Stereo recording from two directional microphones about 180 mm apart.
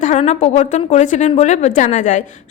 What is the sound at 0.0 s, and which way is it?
A woman's voice, 40° left (ahead or behind).